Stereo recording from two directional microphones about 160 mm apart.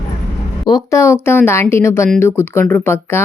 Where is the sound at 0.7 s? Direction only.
20° left (ahead or behind).